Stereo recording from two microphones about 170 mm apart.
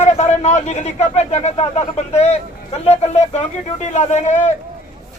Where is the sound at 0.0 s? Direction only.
40° left (ahead or behind).